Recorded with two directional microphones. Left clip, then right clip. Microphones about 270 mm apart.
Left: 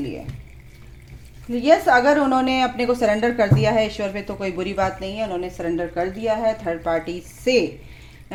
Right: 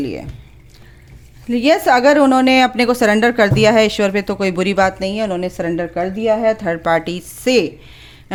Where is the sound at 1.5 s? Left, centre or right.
Right.